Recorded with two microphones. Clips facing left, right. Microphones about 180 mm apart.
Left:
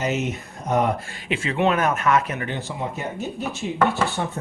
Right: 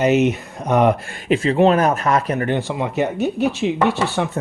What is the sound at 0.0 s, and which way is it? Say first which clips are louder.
Speech: right 9 dB; 70° right (ahead or behind).